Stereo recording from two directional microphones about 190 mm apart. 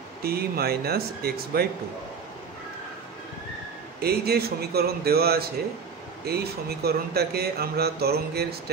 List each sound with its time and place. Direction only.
0.2 s speech: 55° right (ahead or behind)
4.0 s speech: 55° right (ahead or behind)